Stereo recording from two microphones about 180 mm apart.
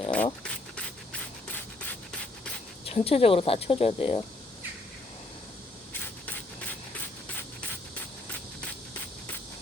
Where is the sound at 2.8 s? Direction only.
30° left (ahead or behind).